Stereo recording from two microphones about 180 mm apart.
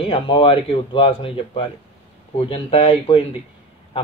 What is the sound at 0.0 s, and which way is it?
A man's voice, 30° left (ahead or behind).